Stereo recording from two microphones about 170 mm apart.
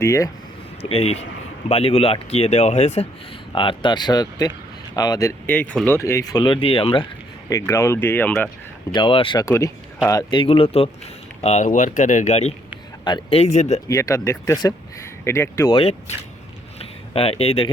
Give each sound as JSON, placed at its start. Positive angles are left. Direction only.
{"t": 0.0, "sound": "speech", "side_deg": 20}
{"t": 0.8, "sound": "speech", "side_deg": 35}
{"t": 3.5, "sound": "speech", "side_deg": 30}
{"t": 5.5, "sound": "speech", "side_deg": 10}
{"t": 7.5, "sound": "speech", "side_deg": 15}
{"t": 8.9, "sound": "speech", "side_deg": 30}
{"t": 9.5, "sound": "speech", "side_deg": 20}
{"t": 11.4, "sound": "speech", "side_deg": 45}
{"t": 13.8, "sound": "speech", "side_deg": 20}
{"t": 15.7, "sound": "speech", "side_deg": 35}
{"t": 16.7, "sound": "a sound", "side_deg": 35}